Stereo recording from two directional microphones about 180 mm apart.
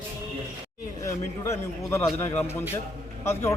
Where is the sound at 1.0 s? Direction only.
15° left (ahead or behind).